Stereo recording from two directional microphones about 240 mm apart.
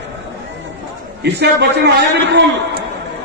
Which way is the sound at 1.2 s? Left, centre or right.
Right.